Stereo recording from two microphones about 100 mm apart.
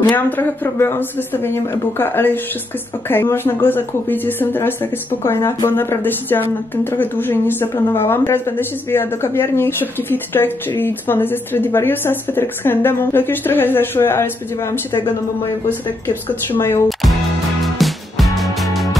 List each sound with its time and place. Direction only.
0.1 s a woman's voice: 25° left (ahead or behind)
16.1 s a woman's voice: 25° left (ahead or behind)
17.7 s music: centre (ahead or behind)